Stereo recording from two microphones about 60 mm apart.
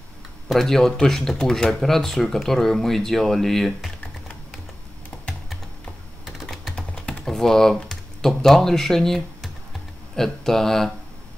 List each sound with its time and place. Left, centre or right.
0.5 s speech: centre
5.1 s computer keyboard: centre
6.7 s typing: centre
7.2 s speech: centre